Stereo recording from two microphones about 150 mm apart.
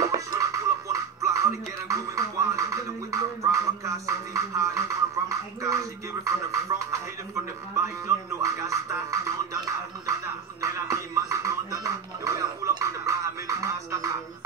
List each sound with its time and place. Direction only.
0.0 s music: 20° right (ahead or behind)
8.4 s music: 20° right (ahead or behind)
10.6 s music: 20° right (ahead or behind)